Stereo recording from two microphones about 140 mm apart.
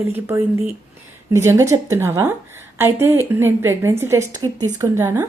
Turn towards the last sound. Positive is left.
turn(degrees=-20)  # may be behind; listen again after turning